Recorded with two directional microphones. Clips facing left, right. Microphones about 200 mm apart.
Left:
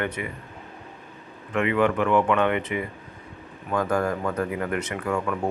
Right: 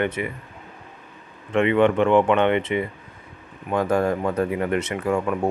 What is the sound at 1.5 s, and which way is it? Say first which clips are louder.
Speech: right 4 dB; 25° right (ahead or behind).